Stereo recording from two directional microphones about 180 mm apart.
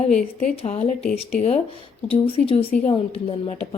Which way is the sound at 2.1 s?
30° left (ahead or behind).